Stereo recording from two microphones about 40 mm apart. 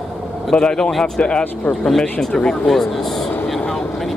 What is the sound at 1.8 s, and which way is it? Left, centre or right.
Speech, centre.